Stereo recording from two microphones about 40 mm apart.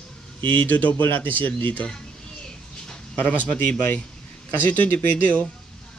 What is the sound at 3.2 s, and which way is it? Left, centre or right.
Speech, left.